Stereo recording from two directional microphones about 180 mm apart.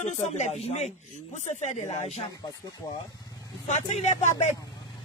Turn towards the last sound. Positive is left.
turn(degrees=40)  # may be behind; listen again after turning